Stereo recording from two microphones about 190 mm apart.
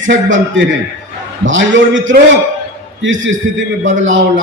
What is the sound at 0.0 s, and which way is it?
A man's voice, 80° right.